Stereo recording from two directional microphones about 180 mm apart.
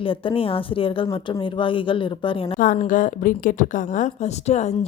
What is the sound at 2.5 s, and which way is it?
A woman's voice, 50° left (ahead or behind).